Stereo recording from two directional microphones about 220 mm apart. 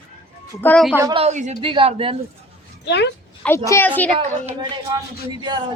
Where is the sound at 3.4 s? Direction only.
10° left (ahead or behind).